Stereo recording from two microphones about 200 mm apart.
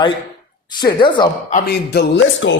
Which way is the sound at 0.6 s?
20° left (ahead or behind).